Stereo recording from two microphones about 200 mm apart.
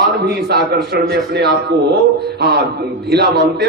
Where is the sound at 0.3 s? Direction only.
55° right (ahead or behind).